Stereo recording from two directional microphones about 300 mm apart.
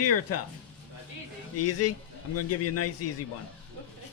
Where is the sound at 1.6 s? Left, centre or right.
Left.